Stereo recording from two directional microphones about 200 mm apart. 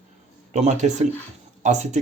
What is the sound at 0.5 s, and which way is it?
Speech, 35° right (ahead or behind).